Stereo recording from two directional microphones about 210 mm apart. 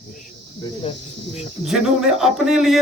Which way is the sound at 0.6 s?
30° left (ahead or behind).